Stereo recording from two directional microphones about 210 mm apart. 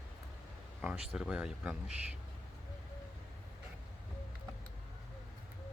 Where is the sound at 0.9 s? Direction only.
5° right (ahead or behind).